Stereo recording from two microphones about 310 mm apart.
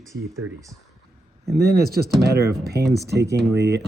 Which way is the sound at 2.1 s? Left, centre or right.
Centre.